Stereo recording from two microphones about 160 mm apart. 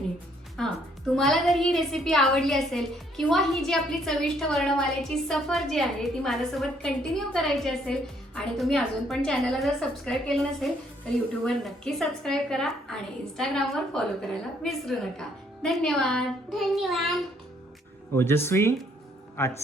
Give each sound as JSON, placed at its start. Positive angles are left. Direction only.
{"t": 0.6, "sound": "a woman's voice", "side_deg": 5}
{"t": 18.1, "sound": "speech", "side_deg": 15}